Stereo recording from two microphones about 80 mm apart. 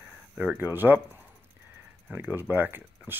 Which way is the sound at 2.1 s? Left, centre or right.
Right.